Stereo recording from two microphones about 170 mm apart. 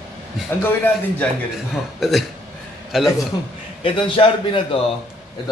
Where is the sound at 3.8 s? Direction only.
30° left (ahead or behind).